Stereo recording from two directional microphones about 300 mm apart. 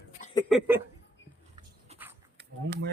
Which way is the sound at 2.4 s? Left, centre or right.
Right.